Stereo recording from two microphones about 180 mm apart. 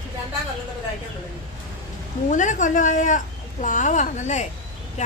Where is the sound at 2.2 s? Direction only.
45° left (ahead or behind).